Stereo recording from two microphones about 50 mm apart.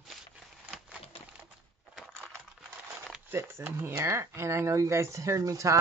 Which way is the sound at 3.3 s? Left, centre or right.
Right.